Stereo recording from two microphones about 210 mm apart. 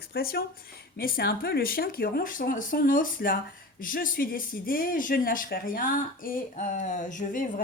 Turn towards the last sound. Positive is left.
turn(degrees=40)  # may be behind; listen again after turning